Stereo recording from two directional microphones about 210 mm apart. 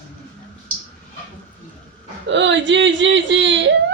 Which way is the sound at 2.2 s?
60° right (ahead or behind).